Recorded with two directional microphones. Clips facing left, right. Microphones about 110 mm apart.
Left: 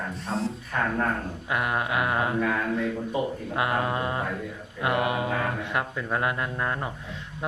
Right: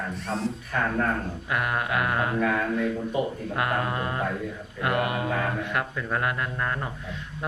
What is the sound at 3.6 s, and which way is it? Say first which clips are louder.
Speech: left 1 dB; 20° left (ahead or behind).